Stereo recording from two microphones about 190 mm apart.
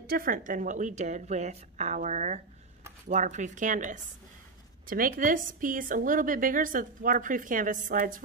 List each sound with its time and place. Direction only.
0.0 s a woman's voice: 50° right (ahead or behind)